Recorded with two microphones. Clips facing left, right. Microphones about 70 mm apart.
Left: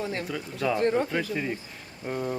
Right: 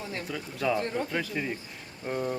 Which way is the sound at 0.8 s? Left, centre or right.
Left.